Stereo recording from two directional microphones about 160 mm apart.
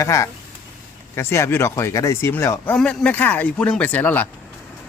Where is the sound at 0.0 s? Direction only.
20° left (ahead or behind).